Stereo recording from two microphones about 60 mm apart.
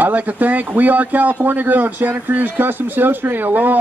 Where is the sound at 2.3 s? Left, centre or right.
Right.